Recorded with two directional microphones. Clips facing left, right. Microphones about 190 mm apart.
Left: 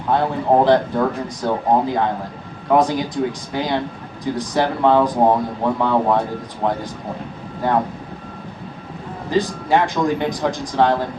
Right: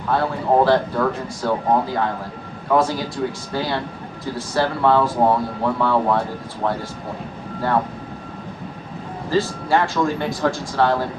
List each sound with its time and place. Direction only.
0.1 s speech: 20° left (ahead or behind)
9.3 s speech: 15° left (ahead or behind)